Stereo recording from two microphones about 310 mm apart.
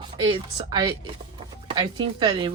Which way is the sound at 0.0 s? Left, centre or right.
Centre.